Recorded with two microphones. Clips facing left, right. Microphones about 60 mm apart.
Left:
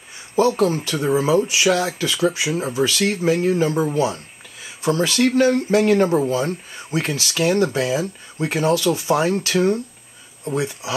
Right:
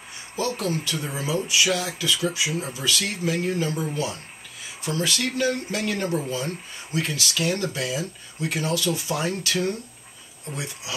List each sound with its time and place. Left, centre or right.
0.8 s speech: left
1.7 s speech: left